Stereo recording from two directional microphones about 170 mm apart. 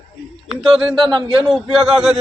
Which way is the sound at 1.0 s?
25° right (ahead or behind).